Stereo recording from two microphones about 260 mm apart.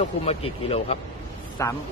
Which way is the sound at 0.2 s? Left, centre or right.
Left.